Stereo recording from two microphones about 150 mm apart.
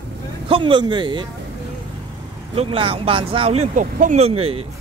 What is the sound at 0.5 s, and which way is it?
Speech, 35° right (ahead or behind).